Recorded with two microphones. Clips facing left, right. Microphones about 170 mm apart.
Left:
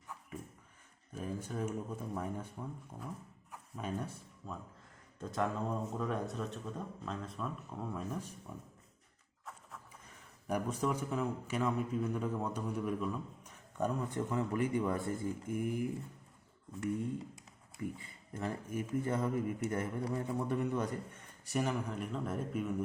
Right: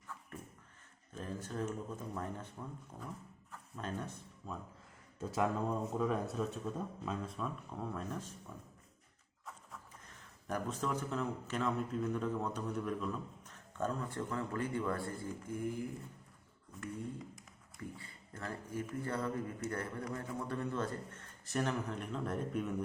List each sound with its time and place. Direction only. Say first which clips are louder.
1.1 s a man's voice: left 2 dB; 10° left (ahead or behind)
3.5 s a sound: left 2 dB; 10° left (ahead or behind)
4.4 s speech: even; centre (ahead or behind)
10.4 s a man's voice: left 3 dB; 10° left (ahead or behind)
17.7 s a man's voice: left 6 dB; 20° left (ahead or behind)